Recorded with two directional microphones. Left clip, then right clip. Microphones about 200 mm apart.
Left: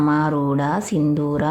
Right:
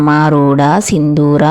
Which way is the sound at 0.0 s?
40° right (ahead or behind).